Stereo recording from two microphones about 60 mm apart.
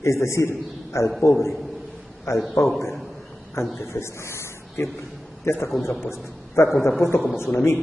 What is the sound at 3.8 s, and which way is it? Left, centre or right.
A man's voice, left.